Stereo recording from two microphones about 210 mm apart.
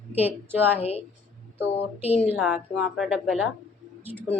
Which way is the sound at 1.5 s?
10° right (ahead or behind).